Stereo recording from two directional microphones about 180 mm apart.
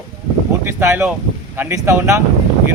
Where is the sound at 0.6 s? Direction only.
15° right (ahead or behind).